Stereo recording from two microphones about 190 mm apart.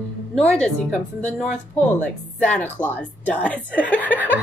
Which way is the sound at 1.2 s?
10° left (ahead or behind).